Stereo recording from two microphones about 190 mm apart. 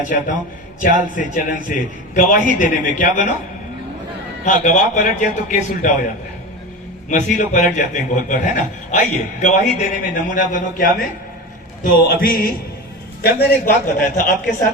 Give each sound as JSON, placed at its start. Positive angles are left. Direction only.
{"t": 0.8, "sound": "speech", "side_deg": 45}
{"t": 4.4, "sound": "a man's voice", "side_deg": 40}
{"t": 7.1, "sound": "speech", "side_deg": 40}